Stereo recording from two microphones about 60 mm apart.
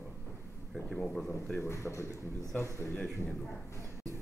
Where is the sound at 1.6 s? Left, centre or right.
Left.